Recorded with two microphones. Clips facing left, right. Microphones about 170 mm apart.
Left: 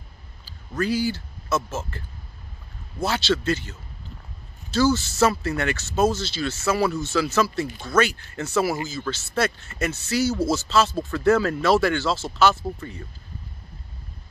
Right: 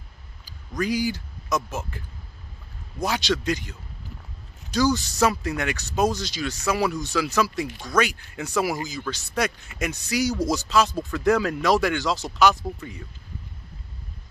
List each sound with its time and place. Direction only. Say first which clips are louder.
0.5 s speech: left 1 dB; 15° right (ahead or behind)